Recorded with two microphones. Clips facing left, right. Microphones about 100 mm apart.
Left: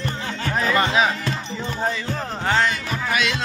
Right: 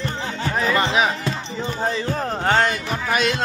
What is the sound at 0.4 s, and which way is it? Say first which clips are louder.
Music: even; 20° right (ahead or behind).